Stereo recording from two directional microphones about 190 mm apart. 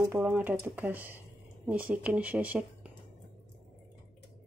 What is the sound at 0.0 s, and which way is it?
Speech, 15° right (ahead or behind).